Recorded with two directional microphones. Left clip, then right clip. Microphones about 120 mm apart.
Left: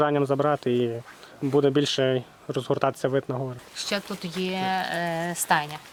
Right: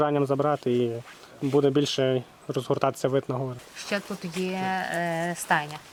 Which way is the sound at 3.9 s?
25° left (ahead or behind).